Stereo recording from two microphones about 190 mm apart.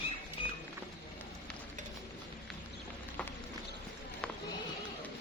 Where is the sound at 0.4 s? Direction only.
30° left (ahead or behind).